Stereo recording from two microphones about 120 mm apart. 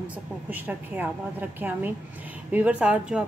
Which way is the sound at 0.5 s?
15° right (ahead or behind).